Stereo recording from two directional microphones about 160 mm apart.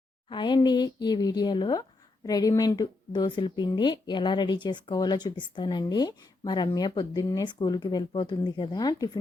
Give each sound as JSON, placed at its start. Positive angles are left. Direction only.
{"t": 0.3, "sound": "speech", "side_deg": 30}